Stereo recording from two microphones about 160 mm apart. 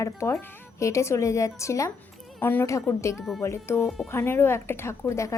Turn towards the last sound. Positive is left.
turn(degrees=20)  # may be behind; listen again after turning